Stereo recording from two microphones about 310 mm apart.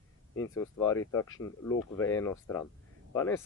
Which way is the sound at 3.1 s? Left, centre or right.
Centre.